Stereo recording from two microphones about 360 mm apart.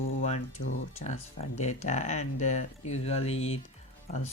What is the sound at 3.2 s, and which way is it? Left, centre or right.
Speech, left.